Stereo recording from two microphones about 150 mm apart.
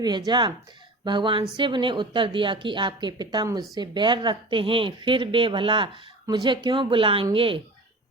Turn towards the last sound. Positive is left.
turn(degrees=-35)  # may be behind; listen again after turning